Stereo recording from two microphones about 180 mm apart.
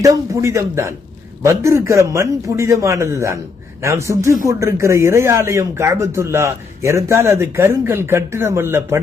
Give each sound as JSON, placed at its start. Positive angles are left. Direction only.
{"t": 0.0, "sound": "speech", "side_deg": -15}